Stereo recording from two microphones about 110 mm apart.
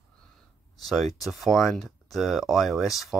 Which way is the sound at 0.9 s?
Centre (ahead or behind).